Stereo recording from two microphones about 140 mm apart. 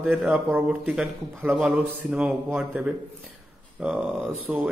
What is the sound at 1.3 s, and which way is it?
Speech, 15° right (ahead or behind).